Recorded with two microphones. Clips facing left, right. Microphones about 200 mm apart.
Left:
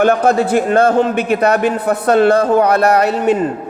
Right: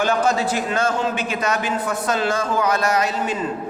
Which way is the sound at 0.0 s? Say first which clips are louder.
Left 7 dB; 60° left (ahead or behind).